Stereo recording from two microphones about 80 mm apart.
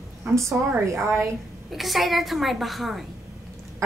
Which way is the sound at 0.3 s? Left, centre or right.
Right.